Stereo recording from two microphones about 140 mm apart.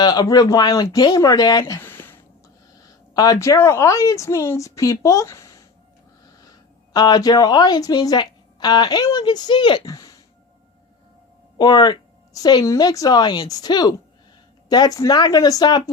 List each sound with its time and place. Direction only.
0.0 s speech: 30° left (ahead or behind)
2.7 s a woman's voice: 25° left (ahead or behind)
11.5 s speech: 30° left (ahead or behind)